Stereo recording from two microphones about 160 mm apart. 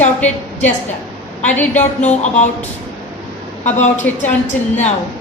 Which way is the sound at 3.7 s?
45° left (ahead or behind).